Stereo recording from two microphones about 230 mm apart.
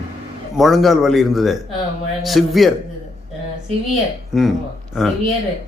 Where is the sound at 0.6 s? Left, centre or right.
Centre.